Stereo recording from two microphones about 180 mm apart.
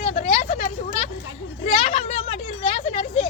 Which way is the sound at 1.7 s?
35° left (ahead or behind).